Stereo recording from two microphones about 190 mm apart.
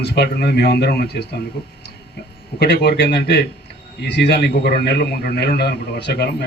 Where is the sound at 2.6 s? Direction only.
60° left (ahead or behind).